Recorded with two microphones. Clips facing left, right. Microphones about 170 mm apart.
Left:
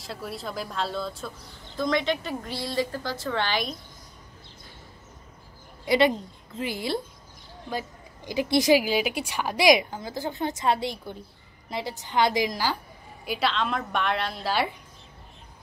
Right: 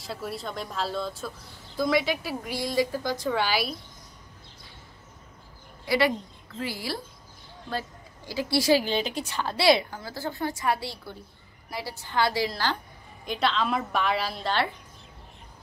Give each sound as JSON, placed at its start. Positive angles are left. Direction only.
{"t": 0.0, "sound": "a woman's voice", "side_deg": 0}
{"t": 5.9, "sound": "a woman's voice", "side_deg": 20}
{"t": 8.3, "sound": "a woman's voice", "side_deg": 20}